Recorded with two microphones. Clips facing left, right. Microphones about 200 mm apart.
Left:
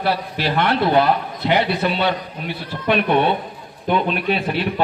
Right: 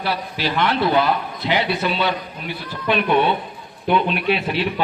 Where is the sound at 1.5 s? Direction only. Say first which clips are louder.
Left 2 dB; 55° left (ahead or behind).